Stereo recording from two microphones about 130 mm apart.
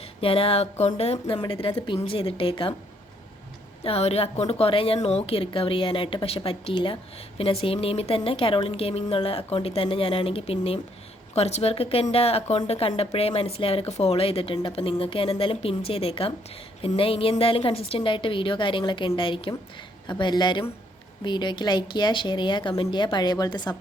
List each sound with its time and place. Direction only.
0.0 s a woman's voice: 45° left (ahead or behind)
3.8 s a woman's voice: 50° left (ahead or behind); by 23.7 s 30° left (ahead or behind)